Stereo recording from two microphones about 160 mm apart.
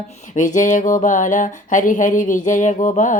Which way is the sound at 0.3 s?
50° left (ahead or behind).